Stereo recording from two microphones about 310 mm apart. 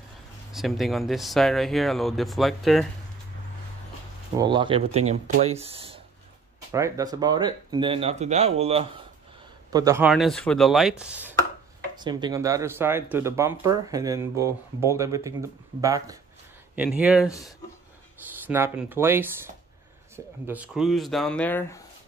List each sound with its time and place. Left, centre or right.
0.5 s speech: centre
4.4 s speech: centre
18.5 s speech: centre
20.4 s speech: centre